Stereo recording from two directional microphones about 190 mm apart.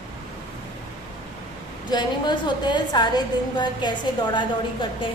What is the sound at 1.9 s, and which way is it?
A woman's voice, 25° left (ahead or behind).